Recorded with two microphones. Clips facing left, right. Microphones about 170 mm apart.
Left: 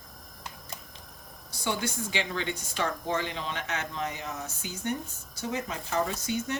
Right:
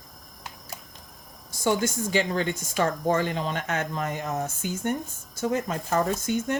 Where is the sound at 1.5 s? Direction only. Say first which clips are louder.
Right 7 dB; 45° right (ahead or behind).